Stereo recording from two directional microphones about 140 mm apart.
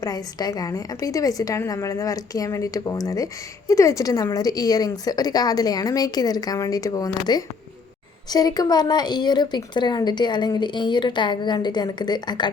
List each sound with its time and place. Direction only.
0.0 s a woman's voice: 25° left (ahead or behind)